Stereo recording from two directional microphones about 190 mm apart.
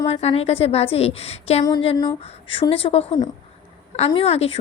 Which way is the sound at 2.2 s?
30° left (ahead or behind).